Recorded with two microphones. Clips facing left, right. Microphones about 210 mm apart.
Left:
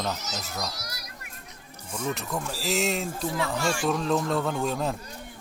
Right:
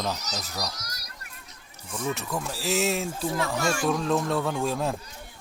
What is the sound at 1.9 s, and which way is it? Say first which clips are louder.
Speech: even; centre (ahead or behind).